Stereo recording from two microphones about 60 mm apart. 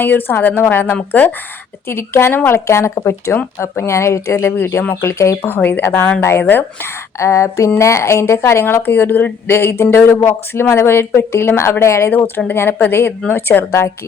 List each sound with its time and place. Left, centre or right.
0.0 s speech: left
2.6 s speech: left
3.0 s a sound: left
3.6 s speech: left
4.5 s speech: left
5.1 s a sound: left
5.4 s speech: left
7.2 s a sound: left
7.8 s speech: left
8.6 s speech: left
12.5 s speech: left
13.7 s speech: left